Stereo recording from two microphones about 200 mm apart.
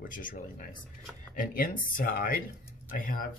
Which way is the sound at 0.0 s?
45° left (ahead or behind).